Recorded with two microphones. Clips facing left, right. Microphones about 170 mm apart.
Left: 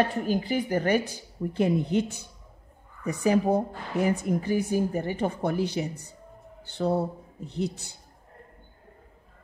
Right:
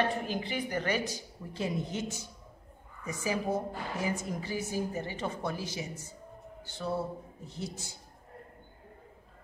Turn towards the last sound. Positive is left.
turn(degrees=65)  # may be behind; listen again after turning